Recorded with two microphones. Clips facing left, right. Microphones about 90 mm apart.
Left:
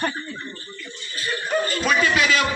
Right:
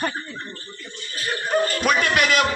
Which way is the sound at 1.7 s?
55° right (ahead or behind).